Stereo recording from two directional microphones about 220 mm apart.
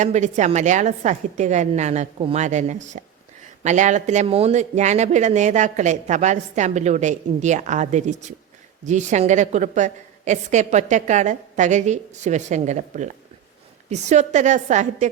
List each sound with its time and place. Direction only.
0.0 s speech: 30° right (ahead or behind)